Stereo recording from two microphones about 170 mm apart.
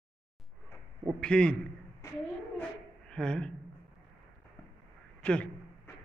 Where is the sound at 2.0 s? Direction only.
20° left (ahead or behind).